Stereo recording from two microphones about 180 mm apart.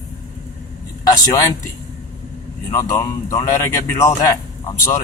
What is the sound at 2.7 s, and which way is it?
A man's voice, 15° left (ahead or behind).